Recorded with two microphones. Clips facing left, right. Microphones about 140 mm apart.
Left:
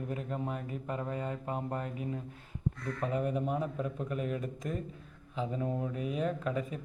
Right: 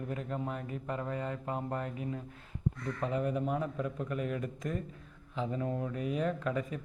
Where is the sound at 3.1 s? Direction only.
30° left (ahead or behind).